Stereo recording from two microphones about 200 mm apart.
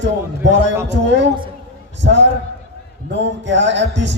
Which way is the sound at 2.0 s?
65° right (ahead or behind).